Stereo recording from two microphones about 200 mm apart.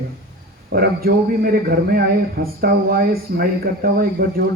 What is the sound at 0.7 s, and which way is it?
A man's voice, 50° right (ahead or behind).